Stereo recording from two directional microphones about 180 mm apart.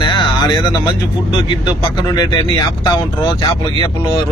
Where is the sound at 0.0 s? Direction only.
25° left (ahead or behind).